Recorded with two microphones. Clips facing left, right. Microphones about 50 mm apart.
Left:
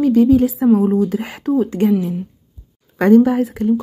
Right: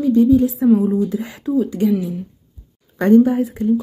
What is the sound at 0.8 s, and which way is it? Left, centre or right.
Speech, left.